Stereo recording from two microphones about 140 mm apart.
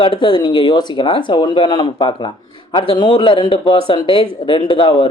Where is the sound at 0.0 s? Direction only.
35° left (ahead or behind).